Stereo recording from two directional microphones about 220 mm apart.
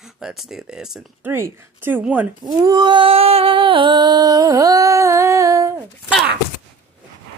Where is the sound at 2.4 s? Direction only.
20° right (ahead or behind).